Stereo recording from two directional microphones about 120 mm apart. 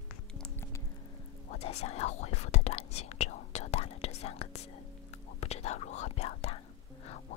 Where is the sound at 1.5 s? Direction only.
65° left (ahead or behind).